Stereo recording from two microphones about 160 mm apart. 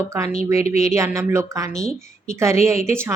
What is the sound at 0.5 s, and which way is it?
Speech, 40° left (ahead or behind).